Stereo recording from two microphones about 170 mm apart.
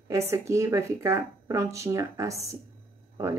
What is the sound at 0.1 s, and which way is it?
Speech, 15° right (ahead or behind).